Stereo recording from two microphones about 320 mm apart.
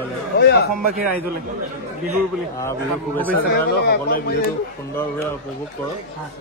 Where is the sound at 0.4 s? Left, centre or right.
Left.